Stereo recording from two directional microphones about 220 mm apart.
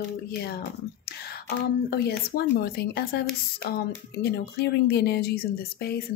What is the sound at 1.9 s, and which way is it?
A woman's voice, 45° left (ahead or behind).